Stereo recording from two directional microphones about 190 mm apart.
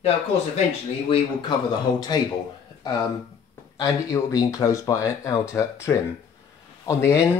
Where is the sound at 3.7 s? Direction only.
20° left (ahead or behind).